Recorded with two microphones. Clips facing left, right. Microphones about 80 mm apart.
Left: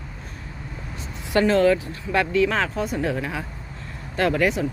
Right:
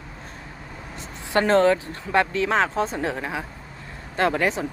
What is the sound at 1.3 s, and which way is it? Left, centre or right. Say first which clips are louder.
Speech: even; right.